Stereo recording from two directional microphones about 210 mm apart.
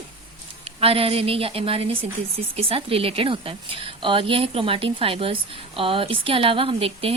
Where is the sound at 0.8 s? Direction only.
25° right (ahead or behind).